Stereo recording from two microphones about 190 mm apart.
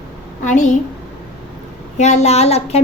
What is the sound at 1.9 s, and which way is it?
Speech, 35° left (ahead or behind).